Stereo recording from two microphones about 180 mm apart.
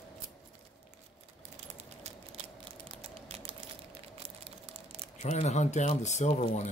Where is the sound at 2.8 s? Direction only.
35° right (ahead or behind).